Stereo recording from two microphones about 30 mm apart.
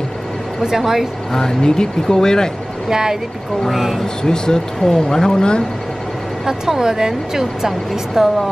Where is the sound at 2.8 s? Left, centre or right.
Centre.